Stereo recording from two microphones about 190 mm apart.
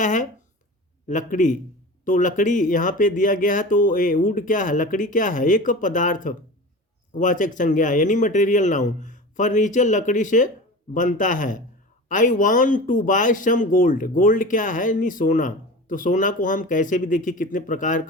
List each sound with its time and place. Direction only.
0.0 s speech: 40° left (ahead or behind)